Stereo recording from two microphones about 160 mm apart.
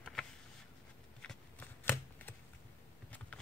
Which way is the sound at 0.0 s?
5° left (ahead or behind).